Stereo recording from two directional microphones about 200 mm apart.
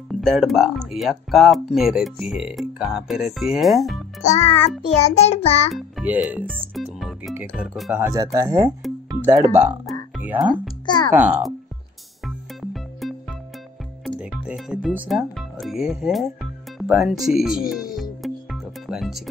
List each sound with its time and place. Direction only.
0.1 s speech: centre (ahead or behind)
4.2 s child singing: 35° left (ahead or behind)
5.9 s speech: 5° right (ahead or behind)
8.0 s speech: 15° right (ahead or behind)
10.1 s music: 10° right (ahead or behind)
11.1 s speech: 10° right (ahead or behind)
12.3 s music: centre (ahead or behind)
14.2 s speech: 5° right (ahead or behind)
16.7 s music: centre (ahead or behind)